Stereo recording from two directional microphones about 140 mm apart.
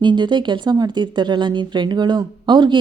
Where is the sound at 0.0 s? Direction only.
35° right (ahead or behind).